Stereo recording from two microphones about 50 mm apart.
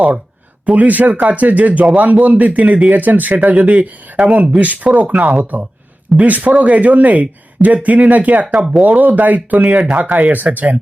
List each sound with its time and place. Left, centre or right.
0.6 s speech: right
2.9 s speech: right
9.6 s speech: right
10.3 s speech: right